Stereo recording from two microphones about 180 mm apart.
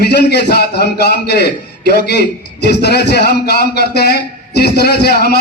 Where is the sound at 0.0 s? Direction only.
65° left (ahead or behind).